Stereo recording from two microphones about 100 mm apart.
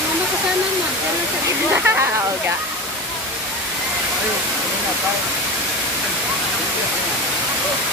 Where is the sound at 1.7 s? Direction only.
25° right (ahead or behind).